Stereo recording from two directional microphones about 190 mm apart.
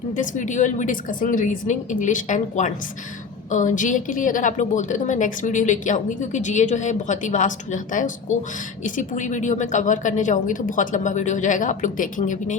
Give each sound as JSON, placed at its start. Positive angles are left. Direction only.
{"t": 0.2, "sound": "a woman's voice", "side_deg": 40}